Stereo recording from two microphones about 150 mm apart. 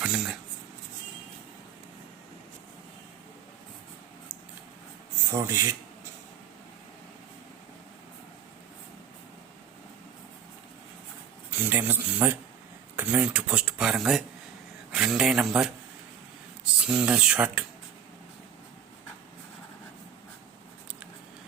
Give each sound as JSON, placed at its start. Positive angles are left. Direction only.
{"t": 0.0, "sound": "a man's voice", "side_deg": -5}
{"t": 5.3, "sound": "speech", "side_deg": -20}
{"t": 11.5, "sound": "a man's voice", "side_deg": -15}
{"t": 16.9, "sound": "speech", "side_deg": -5}